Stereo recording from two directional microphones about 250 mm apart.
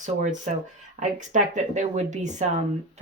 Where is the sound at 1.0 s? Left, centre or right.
Right.